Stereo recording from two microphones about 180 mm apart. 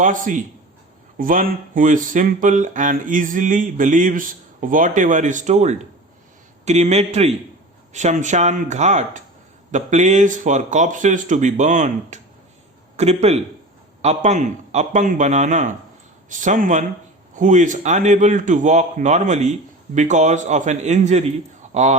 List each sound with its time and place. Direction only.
0.0 s a man's voice: 45° right (ahead or behind)